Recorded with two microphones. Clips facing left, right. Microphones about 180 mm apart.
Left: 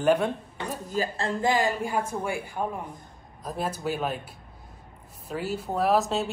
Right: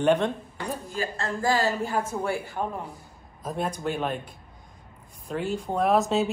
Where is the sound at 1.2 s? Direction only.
20° left (ahead or behind); by 4.2 s 5° left (ahead or behind).